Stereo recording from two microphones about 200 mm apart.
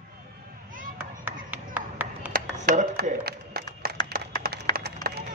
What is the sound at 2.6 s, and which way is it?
Speech, 40° right (ahead or behind).